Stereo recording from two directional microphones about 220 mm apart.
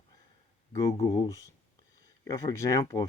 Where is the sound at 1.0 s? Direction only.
15° left (ahead or behind).